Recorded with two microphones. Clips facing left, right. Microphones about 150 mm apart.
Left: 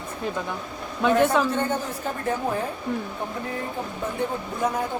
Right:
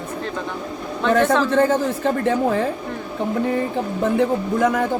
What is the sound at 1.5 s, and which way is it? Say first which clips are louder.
Speech: right 8 dB; 90° right.